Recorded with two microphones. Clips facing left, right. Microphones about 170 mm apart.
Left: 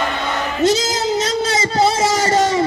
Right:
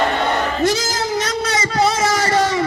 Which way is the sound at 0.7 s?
20° left (ahead or behind).